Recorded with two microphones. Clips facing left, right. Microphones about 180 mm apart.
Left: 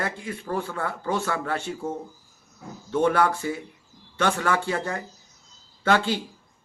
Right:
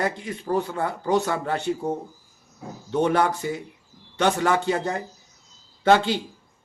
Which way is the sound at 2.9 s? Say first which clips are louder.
Even; 15° right (ahead or behind).